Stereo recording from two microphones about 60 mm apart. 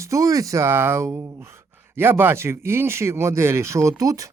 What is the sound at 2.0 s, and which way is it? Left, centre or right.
Speech, right.